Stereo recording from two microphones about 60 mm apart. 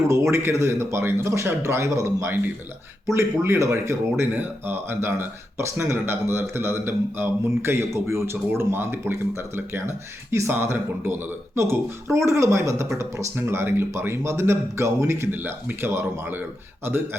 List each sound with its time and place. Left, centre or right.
0.1 s a man's voice: right
4.3 s a man's voice: right
13.3 s a man's voice: right
15.3 s speech: right